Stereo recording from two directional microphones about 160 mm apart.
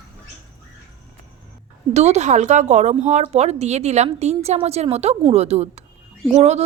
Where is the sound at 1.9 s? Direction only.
45° right (ahead or behind).